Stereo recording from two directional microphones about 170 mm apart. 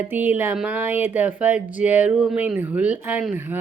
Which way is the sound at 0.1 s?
10° right (ahead or behind).